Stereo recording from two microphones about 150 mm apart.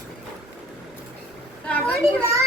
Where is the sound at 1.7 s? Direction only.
10° left (ahead or behind).